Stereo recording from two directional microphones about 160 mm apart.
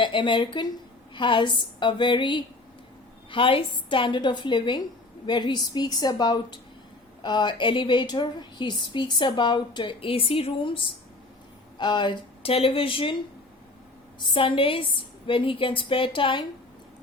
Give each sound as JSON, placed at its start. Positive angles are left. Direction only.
{"t": 0.0, "sound": "a woman's voice", "side_deg": 30}
{"t": 14.2, "sound": "a woman's voice", "side_deg": 30}